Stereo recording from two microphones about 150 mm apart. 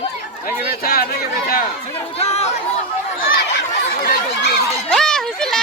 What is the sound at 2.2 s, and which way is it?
Chatter, 45° left (ahead or behind).